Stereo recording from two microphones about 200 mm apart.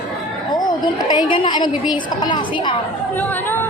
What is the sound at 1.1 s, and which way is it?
A woman's voice, 25° left (ahead or behind).